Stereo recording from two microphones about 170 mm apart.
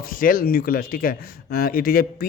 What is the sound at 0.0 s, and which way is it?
Speech, 55° left (ahead or behind).